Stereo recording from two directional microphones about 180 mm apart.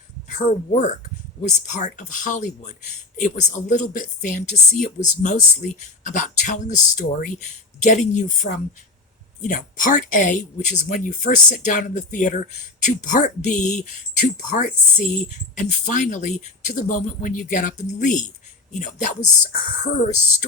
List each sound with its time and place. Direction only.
0.3 s speech: 40° left (ahead or behind)